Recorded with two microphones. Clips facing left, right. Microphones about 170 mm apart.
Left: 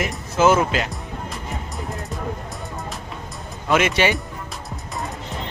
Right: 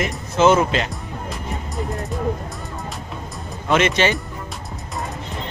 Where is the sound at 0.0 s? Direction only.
5° left (ahead or behind).